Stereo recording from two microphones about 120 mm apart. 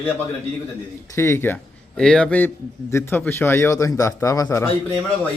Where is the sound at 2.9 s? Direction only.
20° left (ahead or behind).